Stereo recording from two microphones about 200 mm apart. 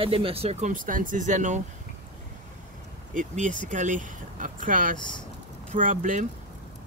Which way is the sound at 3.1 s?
40° right (ahead or behind).